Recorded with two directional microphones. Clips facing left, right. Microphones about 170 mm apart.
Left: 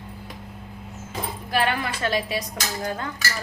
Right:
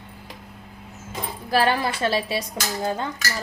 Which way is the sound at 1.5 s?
35° right (ahead or behind).